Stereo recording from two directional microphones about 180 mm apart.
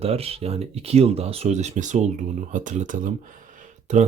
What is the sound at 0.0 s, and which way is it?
Speech, 35° right (ahead or behind).